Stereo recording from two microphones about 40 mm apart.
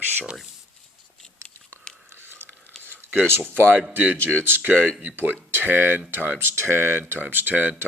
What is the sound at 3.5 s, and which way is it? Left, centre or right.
Speech, right.